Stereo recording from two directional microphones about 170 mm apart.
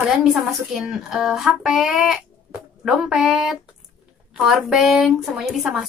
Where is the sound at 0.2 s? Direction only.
5° right (ahead or behind).